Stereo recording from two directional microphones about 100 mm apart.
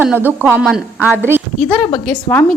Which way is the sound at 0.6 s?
5° right (ahead or behind).